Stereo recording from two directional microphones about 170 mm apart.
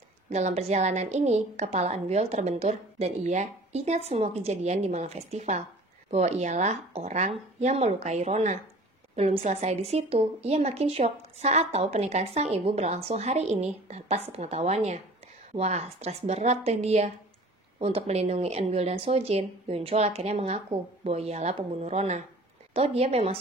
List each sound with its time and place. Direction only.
0.3 s speech: 40° right (ahead or behind)